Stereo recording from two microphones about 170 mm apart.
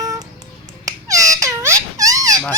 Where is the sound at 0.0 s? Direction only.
20° right (ahead or behind).